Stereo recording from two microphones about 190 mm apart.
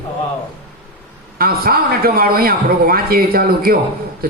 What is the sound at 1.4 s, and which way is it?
A man's voice, 50° right (ahead or behind).